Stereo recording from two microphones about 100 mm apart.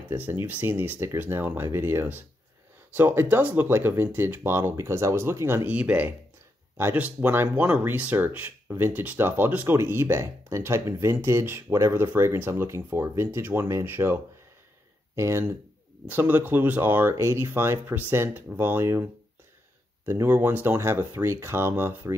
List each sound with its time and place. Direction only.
0.1 s speech: 20° right (ahead or behind)
5.7 s speech: 15° right (ahead or behind)
20.1 s speech: 25° right (ahead or behind)